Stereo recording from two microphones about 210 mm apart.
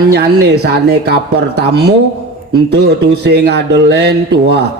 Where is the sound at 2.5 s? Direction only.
50° right (ahead or behind).